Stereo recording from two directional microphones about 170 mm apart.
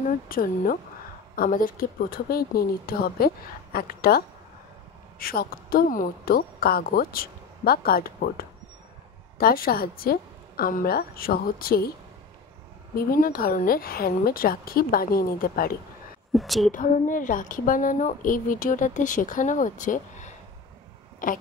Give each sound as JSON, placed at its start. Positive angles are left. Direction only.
{"t": 0.3, "sound": "a woman's voice", "side_deg": 55}
{"t": 5.2, "sound": "a woman's voice", "side_deg": 60}
{"t": 12.9, "sound": "a woman's voice", "side_deg": 60}
{"t": 16.3, "sound": "a woman's voice", "side_deg": 0}
{"t": 16.7, "sound": "speech", "side_deg": 50}